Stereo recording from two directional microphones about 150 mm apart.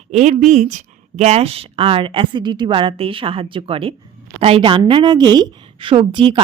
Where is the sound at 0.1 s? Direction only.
50° right (ahead or behind).